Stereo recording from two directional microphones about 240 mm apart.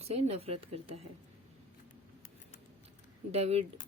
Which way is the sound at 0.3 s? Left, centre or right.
Right.